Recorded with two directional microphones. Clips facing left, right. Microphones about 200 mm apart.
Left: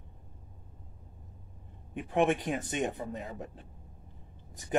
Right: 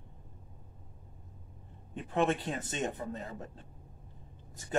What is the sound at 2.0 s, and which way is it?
Speech, 15° left (ahead or behind).